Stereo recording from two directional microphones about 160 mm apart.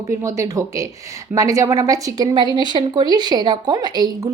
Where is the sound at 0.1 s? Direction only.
20° right (ahead or behind).